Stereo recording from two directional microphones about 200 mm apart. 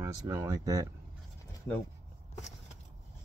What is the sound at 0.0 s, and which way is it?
Speech, 15° right (ahead or behind).